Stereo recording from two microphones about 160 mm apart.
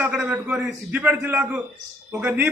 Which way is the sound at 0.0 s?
10° right (ahead or behind).